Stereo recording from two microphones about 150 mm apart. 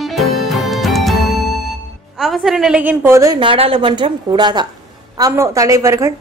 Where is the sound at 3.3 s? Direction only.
35° right (ahead or behind).